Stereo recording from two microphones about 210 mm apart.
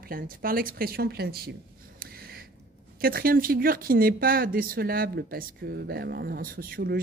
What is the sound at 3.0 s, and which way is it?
Speech, 45° right (ahead or behind).